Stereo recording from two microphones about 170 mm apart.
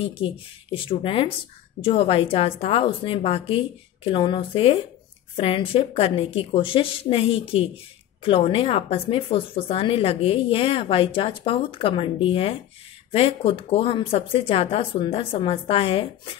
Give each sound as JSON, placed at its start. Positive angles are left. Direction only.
{"t": 0.0, "sound": "a woman's voice", "side_deg": 30}